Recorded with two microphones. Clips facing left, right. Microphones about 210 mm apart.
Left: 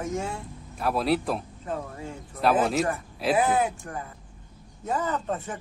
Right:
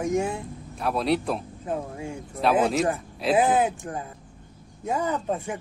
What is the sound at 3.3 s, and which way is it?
Speech, 20° right (ahead or behind).